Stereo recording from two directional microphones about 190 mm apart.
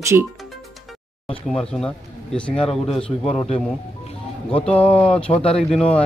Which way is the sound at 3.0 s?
5° left (ahead or behind).